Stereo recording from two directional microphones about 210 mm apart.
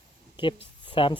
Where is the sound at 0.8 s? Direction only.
25° left (ahead or behind).